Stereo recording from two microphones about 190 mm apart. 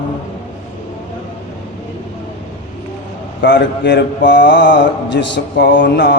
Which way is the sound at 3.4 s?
65° left (ahead or behind).